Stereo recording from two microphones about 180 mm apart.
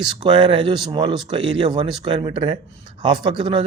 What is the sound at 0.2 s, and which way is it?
A man's voice, 25° right (ahead or behind).